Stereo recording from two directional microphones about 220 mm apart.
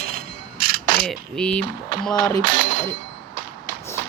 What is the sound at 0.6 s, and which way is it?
Mechanisms, 40° right (ahead or behind).